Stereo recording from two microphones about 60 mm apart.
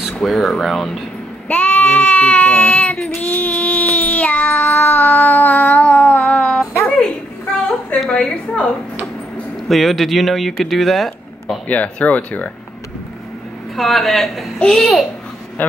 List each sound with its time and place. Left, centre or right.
0.2 s speech: centre
1.5 s speech: left
3.2 s child singing: left
4.7 s a sound: left
8.1 s a sound: centre
9.7 s speech: centre
11.6 s speech: left
13.7 s a child's voice: centre